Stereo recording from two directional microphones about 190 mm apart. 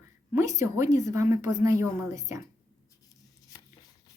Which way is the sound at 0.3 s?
15° right (ahead or behind).